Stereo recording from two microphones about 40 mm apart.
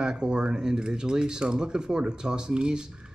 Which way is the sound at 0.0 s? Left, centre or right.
Right.